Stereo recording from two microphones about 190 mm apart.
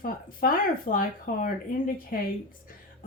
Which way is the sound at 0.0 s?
50° left (ahead or behind).